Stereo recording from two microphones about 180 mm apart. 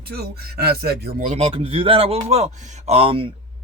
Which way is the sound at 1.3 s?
35° right (ahead or behind).